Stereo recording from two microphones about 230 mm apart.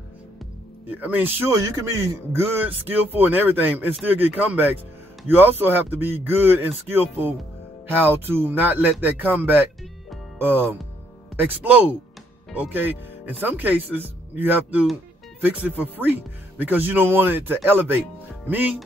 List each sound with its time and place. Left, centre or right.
0.8 s speech: centre